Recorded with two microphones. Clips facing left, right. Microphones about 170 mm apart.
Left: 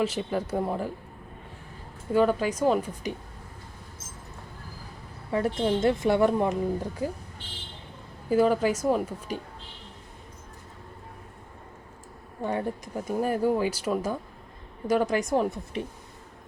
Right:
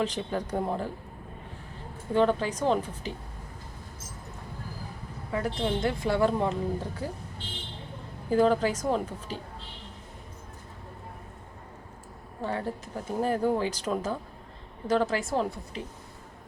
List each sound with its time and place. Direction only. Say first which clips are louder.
0.0 s speech: left 2 dB; 10° left (ahead or behind)
2.1 s speech: left 2 dB; 10° left (ahead or behind)
5.3 s speech: left 4 dB; 25° left (ahead or behind)
8.3 s speech: left 1 dB; 10° left (ahead or behind)
12.4 s speech: left 3 dB; 15° left (ahead or behind)